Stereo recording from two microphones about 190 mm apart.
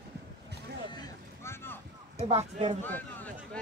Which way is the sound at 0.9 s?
15° left (ahead or behind).